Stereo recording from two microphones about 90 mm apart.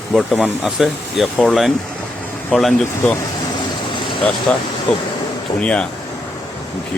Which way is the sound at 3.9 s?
65° left (ahead or behind).